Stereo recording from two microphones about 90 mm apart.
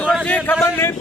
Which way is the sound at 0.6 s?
30° left (ahead or behind).